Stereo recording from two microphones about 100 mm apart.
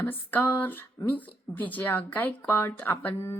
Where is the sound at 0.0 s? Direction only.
20° left (ahead or behind).